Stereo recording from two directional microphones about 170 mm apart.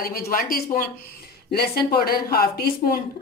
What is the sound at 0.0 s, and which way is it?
Speech, 60° left (ahead or behind).